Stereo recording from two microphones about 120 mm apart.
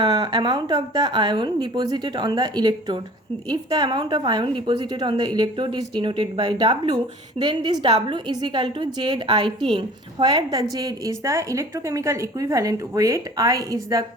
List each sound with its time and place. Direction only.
0.0 s a woman's voice: 35° right (ahead or behind)